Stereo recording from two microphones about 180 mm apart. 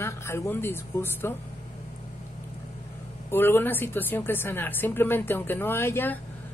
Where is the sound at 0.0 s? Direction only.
15° left (ahead or behind).